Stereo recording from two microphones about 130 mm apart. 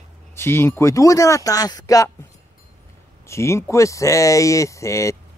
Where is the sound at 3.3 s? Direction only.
20° left (ahead or behind).